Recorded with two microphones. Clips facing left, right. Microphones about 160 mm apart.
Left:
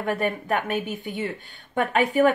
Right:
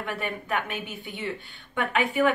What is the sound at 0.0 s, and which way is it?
A woman's voice, 40° left (ahead or behind).